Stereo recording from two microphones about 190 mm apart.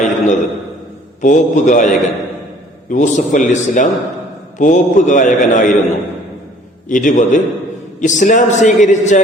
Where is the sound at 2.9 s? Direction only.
40° left (ahead or behind).